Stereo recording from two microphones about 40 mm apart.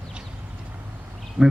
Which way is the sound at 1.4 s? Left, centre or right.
Right.